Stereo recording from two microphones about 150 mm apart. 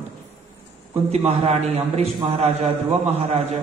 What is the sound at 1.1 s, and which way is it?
A man's voice, 40° right (ahead or behind).